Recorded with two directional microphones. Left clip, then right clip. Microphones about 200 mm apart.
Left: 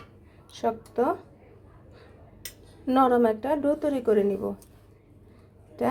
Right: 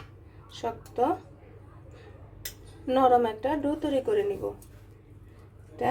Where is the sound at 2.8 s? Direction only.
30° left (ahead or behind).